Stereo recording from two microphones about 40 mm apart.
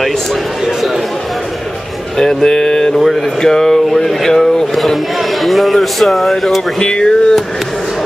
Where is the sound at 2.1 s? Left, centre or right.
Centre.